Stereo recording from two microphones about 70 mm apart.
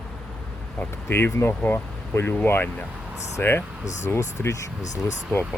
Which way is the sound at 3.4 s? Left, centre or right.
Left.